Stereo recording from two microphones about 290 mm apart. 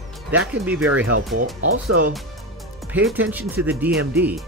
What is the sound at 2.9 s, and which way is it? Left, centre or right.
Speech, centre.